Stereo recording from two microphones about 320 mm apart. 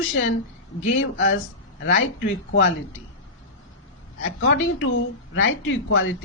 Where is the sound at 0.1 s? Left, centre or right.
Left.